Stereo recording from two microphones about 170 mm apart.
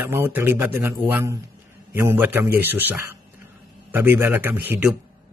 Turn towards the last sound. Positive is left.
turn(degrees=-10)  # may be behind; listen again after turning